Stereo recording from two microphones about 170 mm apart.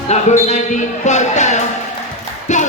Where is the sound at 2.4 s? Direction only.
45° left (ahead or behind).